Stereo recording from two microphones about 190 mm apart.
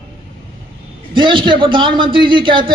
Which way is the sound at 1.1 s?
25° right (ahead or behind).